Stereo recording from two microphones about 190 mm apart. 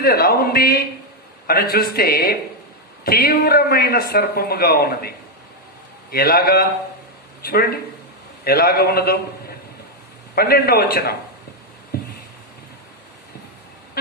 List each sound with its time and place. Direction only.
0.0 s speech: 55° left (ahead or behind)
10.3 s speech: 55° left (ahead or behind)
11.9 s a sound: 55° left (ahead or behind)